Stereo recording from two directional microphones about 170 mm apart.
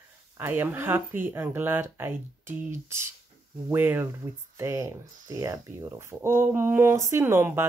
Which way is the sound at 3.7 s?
10° right (ahead or behind).